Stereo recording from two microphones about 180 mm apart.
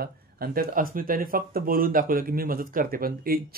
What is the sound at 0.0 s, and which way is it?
Speech, 55° right (ahead or behind).